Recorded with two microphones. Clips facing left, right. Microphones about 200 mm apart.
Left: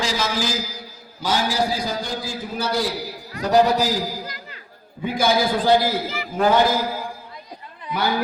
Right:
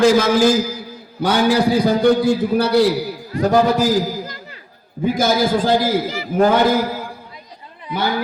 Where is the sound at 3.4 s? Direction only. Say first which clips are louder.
Right 3 dB; 50° right (ahead or behind).